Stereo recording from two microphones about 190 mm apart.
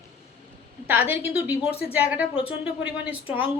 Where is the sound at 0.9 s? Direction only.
10° right (ahead or behind).